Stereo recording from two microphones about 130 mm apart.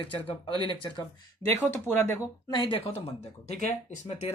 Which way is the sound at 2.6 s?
45° left (ahead or behind).